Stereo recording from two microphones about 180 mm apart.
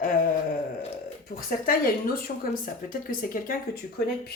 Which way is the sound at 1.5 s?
55° left (ahead or behind).